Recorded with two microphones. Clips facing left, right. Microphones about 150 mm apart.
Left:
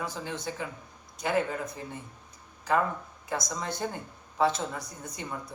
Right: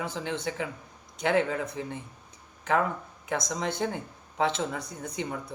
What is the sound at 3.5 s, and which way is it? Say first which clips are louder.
Speech: right 3 dB; 90° right.